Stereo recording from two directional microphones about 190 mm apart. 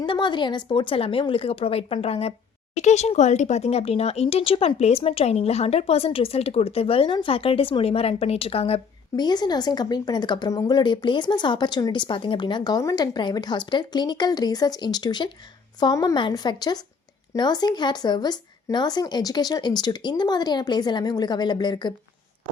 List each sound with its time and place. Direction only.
0.0 s speech: 25° left (ahead or behind)